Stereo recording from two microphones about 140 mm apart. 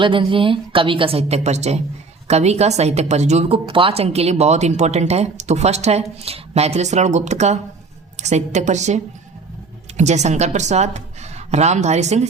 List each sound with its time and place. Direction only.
0.0 s a woman's voice: 40° right (ahead or behind); by 9.0 s 55° right (ahead or behind)
10.0 s a woman's voice: 55° right (ahead or behind)